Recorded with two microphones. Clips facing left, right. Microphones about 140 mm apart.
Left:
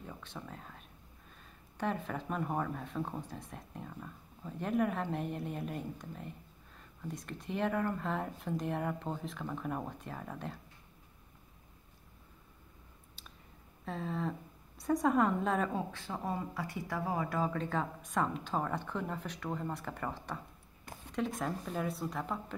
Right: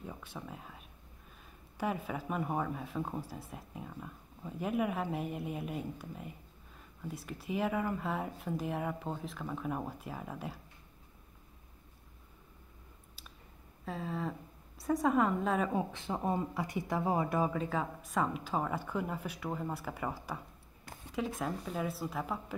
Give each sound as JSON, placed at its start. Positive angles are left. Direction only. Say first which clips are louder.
{"t": 0.0, "sound": "a sound", "louder": "right 1 dB", "side_deg": -10}
{"t": 1.8, "sound": "speech", "louder": "even", "side_deg": -5}
{"t": 13.8, "sound": "speech", "louder": "left 1 dB", "side_deg": 0}
{"t": 15.7, "sound": "speech", "louder": "right 3 dB", "side_deg": -20}
{"t": 17.5, "sound": "speech", "louder": "right 1 dB", "side_deg": -5}